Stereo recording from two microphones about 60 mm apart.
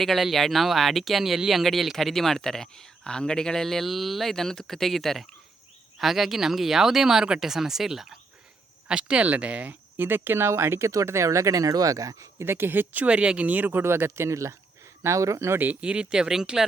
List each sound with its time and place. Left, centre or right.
0.0 s speech: centre; by 9.7 s right
10.2 s speech: right
12.4 s speech: right
13.1 s speech: centre
13.8 s speech: right
15.5 s speech: right
15.8 s speech: centre